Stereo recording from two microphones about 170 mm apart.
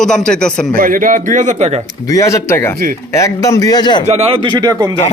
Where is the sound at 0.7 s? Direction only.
55° right (ahead or behind).